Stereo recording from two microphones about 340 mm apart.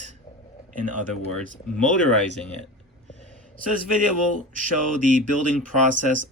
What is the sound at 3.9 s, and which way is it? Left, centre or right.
Speech, right.